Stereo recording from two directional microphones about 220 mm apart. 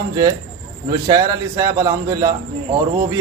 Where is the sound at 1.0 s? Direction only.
15° right (ahead or behind).